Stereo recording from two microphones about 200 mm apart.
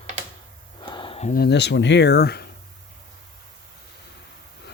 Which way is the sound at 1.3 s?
55° left (ahead or behind).